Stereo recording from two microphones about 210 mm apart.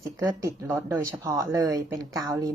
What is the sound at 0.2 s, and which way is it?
Speech, 15° right (ahead or behind).